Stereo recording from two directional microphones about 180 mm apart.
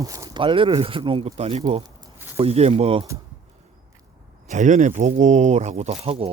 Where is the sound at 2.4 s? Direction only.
35° right (ahead or behind).